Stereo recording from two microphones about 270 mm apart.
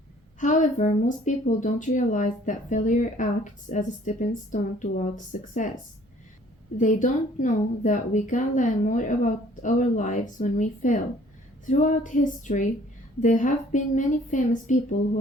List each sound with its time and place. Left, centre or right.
0.3 s a woman's voice: left
6.7 s a woman's voice: left